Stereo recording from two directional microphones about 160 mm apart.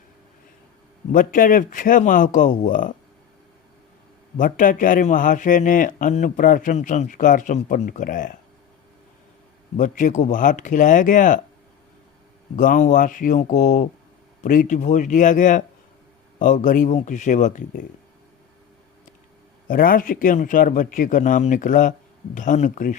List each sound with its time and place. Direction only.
1.1 s speech: 55° left (ahead or behind)
4.4 s speech: 55° left (ahead or behind)
9.7 s speech: 55° left (ahead or behind)
12.5 s speech: 50° left (ahead or behind)
19.6 s speech: 60° left (ahead or behind)